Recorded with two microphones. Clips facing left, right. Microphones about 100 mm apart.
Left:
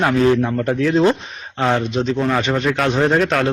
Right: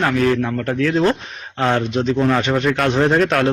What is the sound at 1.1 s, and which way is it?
A man's voice, centre (ahead or behind).